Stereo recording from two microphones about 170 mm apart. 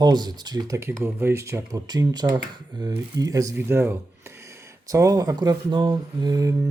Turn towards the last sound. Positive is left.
turn(degrees=-20)  # may be behind; listen again after turning